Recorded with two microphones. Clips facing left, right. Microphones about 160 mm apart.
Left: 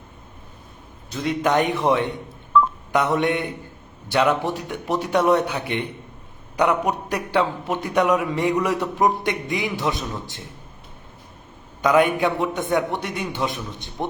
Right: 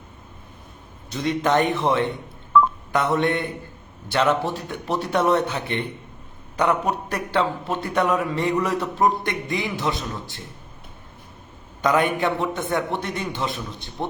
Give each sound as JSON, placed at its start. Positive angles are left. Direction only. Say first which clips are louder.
{"t": 1.1, "sound": "a man's voice", "louder": "even", "side_deg": 5}
{"t": 11.8, "sound": "a man's voice", "louder": "left 3 dB", "side_deg": 10}